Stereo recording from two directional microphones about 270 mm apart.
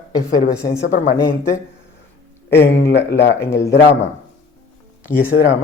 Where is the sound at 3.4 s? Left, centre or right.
Centre.